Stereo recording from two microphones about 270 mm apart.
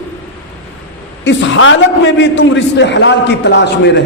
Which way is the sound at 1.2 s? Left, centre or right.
Left.